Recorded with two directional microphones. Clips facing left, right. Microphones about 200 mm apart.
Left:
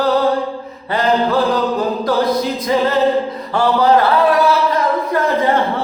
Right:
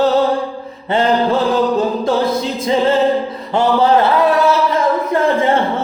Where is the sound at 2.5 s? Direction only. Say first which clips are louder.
Right 2 dB; 25° right (ahead or behind).